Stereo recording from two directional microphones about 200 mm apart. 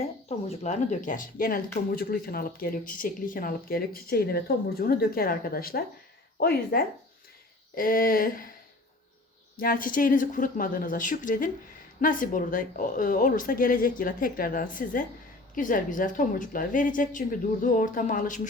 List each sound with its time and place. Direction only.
0.0 s speech: 35° left (ahead or behind)
9.6 s a woman's voice: 45° left (ahead or behind)